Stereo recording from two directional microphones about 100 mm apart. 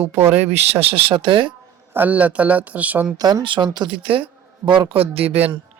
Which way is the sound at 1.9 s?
15° right (ahead or behind).